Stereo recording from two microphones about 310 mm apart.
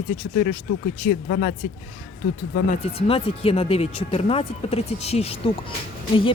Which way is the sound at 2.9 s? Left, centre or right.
Centre.